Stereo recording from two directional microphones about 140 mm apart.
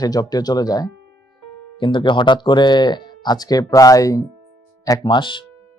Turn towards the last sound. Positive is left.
turn(degrees=35)  # may be behind; listen again after turning